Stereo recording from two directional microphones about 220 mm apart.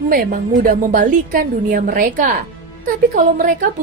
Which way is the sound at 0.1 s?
40° right (ahead or behind).